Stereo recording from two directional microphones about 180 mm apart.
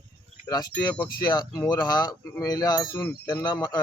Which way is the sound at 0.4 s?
20° left (ahead or behind).